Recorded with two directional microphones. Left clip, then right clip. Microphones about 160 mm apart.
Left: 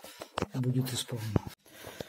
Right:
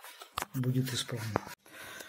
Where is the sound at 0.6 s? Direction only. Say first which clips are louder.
Even; 15° left (ahead or behind).